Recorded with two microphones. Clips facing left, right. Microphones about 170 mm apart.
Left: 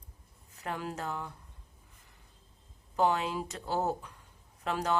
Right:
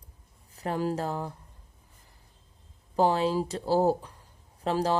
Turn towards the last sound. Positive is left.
turn(degrees=-30)  # may be behind; listen again after turning